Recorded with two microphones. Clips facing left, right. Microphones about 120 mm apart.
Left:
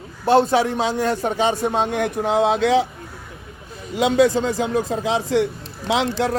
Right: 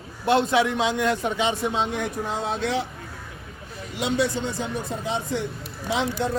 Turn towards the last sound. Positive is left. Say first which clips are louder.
# left 5 dB
turn(degrees=90)